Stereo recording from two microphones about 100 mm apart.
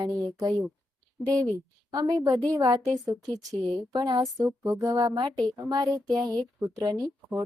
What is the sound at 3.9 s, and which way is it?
A woman's voice, 40° right (ahead or behind).